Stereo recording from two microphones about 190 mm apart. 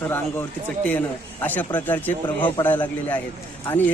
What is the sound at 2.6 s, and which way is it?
Speech, 10° left (ahead or behind).